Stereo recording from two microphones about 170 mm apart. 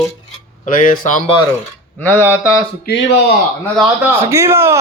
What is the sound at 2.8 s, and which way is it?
Speech, 70° left (ahead or behind).